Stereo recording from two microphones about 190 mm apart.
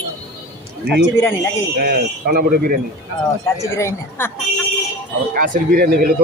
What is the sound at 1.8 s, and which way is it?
Speech, 55° right (ahead or behind).